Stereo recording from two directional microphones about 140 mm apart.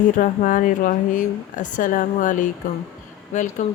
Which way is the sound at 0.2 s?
70° left (ahead or behind).